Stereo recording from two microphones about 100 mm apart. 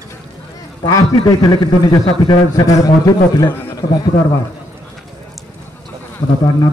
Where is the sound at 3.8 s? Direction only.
40° left (ahead or behind).